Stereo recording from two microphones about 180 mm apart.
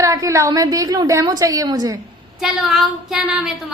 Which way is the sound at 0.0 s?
20° right (ahead or behind).